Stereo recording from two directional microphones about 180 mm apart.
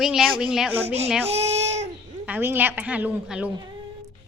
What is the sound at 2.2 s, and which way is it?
Speech, 10° right (ahead or behind).